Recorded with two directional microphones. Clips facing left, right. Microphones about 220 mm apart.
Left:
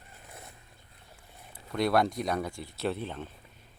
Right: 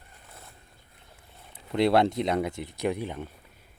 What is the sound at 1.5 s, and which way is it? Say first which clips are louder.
Speech: right 4 dB; 25° right (ahead or behind).